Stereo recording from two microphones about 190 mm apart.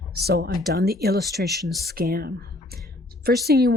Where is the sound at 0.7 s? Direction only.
55° right (ahead or behind).